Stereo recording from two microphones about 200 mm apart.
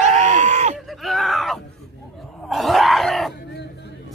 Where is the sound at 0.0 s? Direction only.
35° right (ahead or behind).